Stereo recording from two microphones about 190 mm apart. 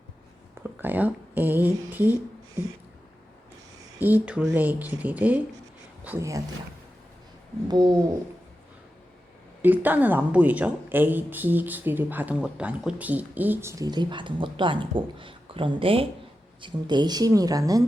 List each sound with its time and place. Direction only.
0.6 s speech: 10° right (ahead or behind)
4.0 s speech: 10° right (ahead or behind)
7.7 s speech: 20° right (ahead or behind)
9.6 s speech: 10° right (ahead or behind)